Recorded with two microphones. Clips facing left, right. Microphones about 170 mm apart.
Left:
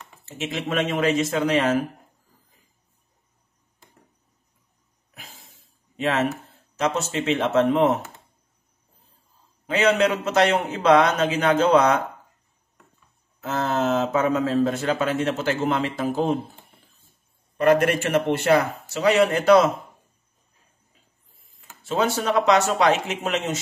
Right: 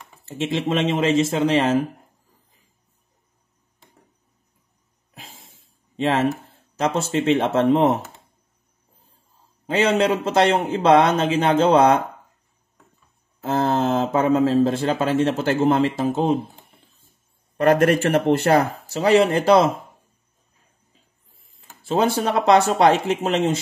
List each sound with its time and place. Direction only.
0.2 s a man's voice: 30° right (ahead or behind)
5.1 s a sound: 25° right (ahead or behind)
6.8 s speech: 30° right (ahead or behind)
9.7 s a man's voice: 30° right (ahead or behind)
13.4 s speech: 30° right (ahead or behind)
17.6 s speech: 40° right (ahead or behind)
21.5 s speech: 30° right (ahead or behind)